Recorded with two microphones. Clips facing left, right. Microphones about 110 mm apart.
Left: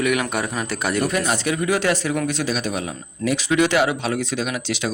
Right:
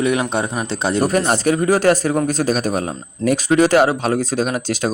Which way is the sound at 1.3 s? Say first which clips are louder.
Right 5 dB; 40° right (ahead or behind).